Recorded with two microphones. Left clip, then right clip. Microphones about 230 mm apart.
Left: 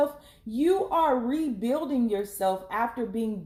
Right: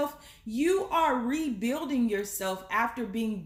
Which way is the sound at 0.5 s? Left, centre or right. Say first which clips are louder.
Left 2 dB; right.